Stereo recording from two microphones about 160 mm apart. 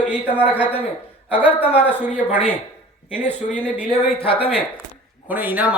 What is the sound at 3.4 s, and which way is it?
Speech, 50° left (ahead or behind).